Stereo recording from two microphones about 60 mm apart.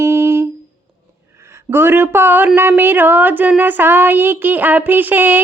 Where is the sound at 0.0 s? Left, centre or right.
Right.